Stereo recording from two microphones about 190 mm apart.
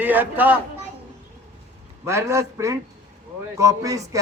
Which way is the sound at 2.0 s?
15° right (ahead or behind).